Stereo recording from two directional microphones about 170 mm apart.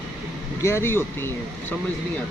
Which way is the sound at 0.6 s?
15° left (ahead or behind).